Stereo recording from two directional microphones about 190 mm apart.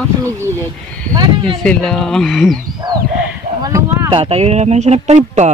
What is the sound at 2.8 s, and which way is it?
Speech, 20° right (ahead or behind).